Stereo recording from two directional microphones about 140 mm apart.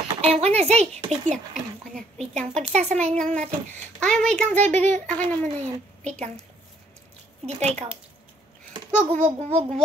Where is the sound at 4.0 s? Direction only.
5° left (ahead or behind).